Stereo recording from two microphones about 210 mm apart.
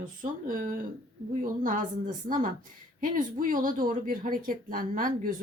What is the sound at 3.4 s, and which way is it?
A woman's voice, 40° right (ahead or behind).